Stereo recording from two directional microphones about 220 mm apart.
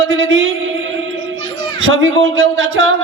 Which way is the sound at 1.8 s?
60° right (ahead or behind).